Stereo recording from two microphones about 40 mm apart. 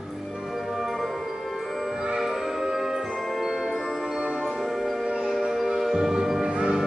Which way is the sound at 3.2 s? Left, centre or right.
Centre.